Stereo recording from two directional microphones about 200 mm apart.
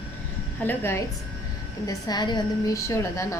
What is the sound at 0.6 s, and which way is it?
Speech, 10° left (ahead or behind).